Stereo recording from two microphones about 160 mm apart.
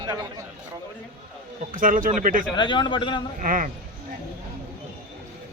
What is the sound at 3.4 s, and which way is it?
Speech, 55° right (ahead or behind).